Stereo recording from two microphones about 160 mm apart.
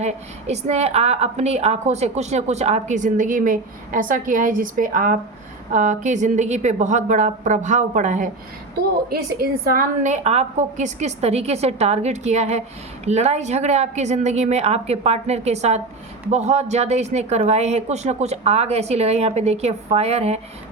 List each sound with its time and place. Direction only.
0.0 s a woman's voice: 45° right (ahead or behind)
9.0 s a woman's voice: 70° right (ahead or behind); by 20.4 s 40° right (ahead or behind)